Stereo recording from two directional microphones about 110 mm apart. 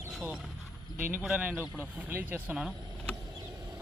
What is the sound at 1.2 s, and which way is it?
Speech, 10° right (ahead or behind).